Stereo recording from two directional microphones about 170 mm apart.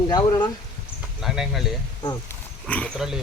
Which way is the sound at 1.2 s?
Centre (ahead or behind).